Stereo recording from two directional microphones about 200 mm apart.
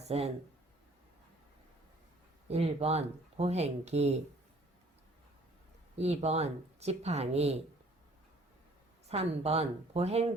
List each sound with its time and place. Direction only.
0.0 s speech: 30° right (ahead or behind)
2.5 s speech: 30° right (ahead or behind)
6.0 s speech: 30° right (ahead or behind)
9.0 s speech: 30° right (ahead or behind)